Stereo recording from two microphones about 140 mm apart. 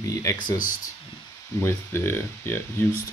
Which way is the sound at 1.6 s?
15° left (ahead or behind).